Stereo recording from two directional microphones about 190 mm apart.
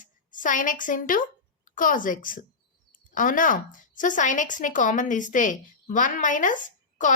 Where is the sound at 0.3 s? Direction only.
45° left (ahead or behind).